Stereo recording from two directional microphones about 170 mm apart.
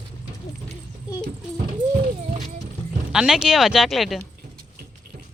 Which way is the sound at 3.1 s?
5° right (ahead or behind).